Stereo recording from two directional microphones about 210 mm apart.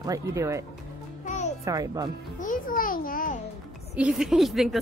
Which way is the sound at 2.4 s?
40° left (ahead or behind).